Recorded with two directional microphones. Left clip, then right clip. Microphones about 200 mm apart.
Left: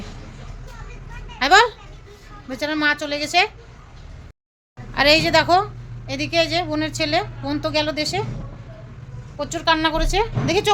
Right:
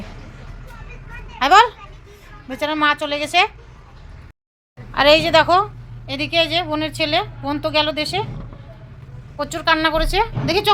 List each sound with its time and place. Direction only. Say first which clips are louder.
1.4 s children playing: right 2 dB; 5° right (ahead or behind)
2.6 s a woman's voice: right 3 dB; centre (ahead or behind)
4.9 s a woman's voice: right 3 dB; centre (ahead or behind)
9.4 s a woman's voice: right 2 dB; 10° right (ahead or behind)